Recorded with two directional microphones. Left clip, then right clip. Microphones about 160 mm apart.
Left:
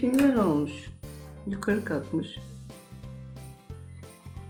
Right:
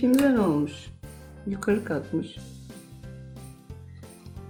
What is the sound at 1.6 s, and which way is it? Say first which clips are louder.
Speech: right 3 dB; 30° right (ahead or behind).